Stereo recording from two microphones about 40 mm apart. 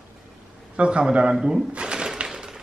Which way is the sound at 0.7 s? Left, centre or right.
Right.